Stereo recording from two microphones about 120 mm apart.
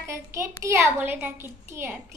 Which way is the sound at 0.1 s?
20° right (ahead or behind).